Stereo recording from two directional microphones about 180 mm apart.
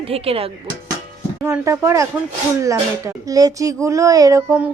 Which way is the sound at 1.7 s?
15° right (ahead or behind).